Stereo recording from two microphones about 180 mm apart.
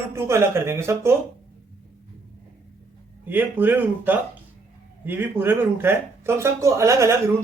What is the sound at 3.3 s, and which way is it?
Speech, 10° right (ahead or behind).